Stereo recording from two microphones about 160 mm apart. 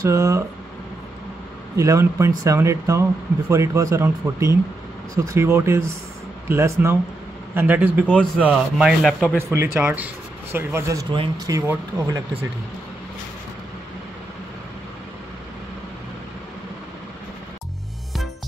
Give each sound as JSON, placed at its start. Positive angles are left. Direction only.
{"t": 0.0, "sound": "speech", "side_deg": -20}
{"t": 1.8, "sound": "speech", "side_deg": -20}